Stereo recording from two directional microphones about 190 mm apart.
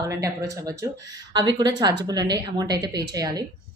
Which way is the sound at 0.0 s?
15° right (ahead or behind).